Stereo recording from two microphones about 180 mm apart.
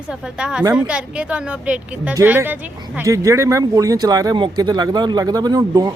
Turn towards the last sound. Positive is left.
turn(degrees=-20)  # may be behind; listen again after turning